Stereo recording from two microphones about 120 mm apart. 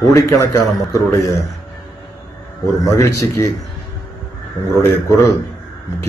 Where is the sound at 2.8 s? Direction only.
25° left (ahead or behind).